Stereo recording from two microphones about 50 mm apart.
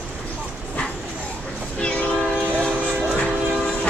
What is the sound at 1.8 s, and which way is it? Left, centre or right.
Train, left.